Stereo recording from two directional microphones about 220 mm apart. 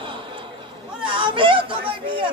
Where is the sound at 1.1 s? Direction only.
25° right (ahead or behind).